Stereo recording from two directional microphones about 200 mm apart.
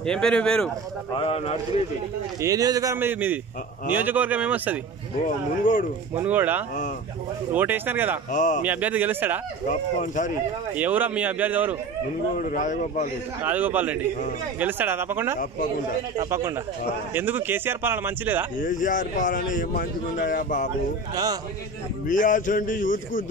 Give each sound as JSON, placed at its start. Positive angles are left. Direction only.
{"t": 0.0, "sound": "speech", "side_deg": 5}
{"t": 1.1, "sound": "speech", "side_deg": 30}
{"t": 2.4, "sound": "speech", "side_deg": -15}
{"t": 5.6, "sound": "speech", "side_deg": 40}
{"t": 6.1, "sound": "speech", "side_deg": -10}
{"t": 8.3, "sound": "speech", "side_deg": 40}
{"t": 8.6, "sound": "speech", "side_deg": -10}
{"t": 9.7, "sound": "speech", "side_deg": 40}
{"t": 10.8, "sound": "speech", "side_deg": -10}
{"t": 12.4, "sound": "speech", "side_deg": 40}
{"t": 13.4, "sound": "speech", "side_deg": -10}
{"t": 18.6, "sound": "speech", "side_deg": 40}
{"t": 21.1, "sound": "a man's voice", "side_deg": -20}
{"t": 22.0, "sound": "speech", "side_deg": 40}